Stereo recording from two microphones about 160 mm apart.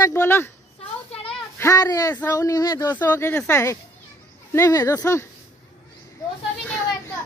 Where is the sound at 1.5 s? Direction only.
20° left (ahead or behind).